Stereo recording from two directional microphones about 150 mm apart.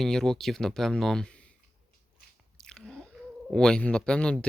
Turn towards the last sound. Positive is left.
turn(degrees=5)  # may be behind; listen again after turning